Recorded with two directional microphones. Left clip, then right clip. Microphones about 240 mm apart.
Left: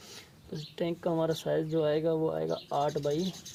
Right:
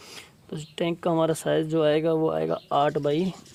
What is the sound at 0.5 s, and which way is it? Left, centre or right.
Speech, right.